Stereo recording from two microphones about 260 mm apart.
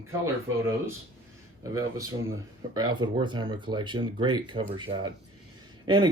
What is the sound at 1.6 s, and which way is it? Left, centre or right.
Speech, centre.